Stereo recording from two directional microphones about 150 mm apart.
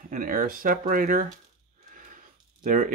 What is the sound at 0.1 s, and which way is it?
Speech, 65° right (ahead or behind).